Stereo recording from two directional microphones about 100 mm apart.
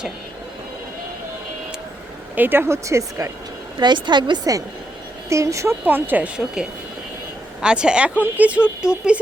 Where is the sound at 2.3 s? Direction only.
20° right (ahead or behind).